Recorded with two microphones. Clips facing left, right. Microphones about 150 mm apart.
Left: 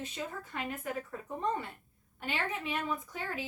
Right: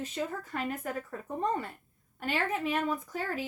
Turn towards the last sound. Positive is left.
turn(degrees=-45)  # may be behind; listen again after turning